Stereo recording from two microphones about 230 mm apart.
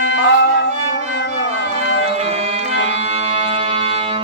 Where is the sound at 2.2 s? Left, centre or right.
Right.